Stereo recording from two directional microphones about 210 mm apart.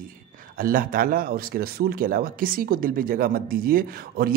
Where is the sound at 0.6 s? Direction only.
45° right (ahead or behind).